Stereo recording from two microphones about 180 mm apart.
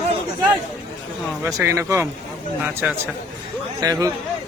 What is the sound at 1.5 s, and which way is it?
Speech, 15° right (ahead or behind).